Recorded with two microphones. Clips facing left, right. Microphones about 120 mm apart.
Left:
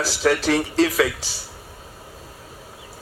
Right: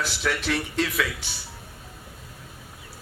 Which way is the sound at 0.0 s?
35° left (ahead or behind).